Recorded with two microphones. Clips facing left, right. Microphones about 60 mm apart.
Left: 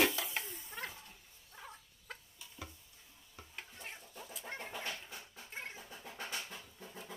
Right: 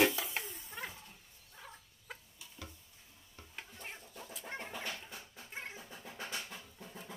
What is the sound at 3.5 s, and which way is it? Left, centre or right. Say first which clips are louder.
Chicken: right 1 dB; centre.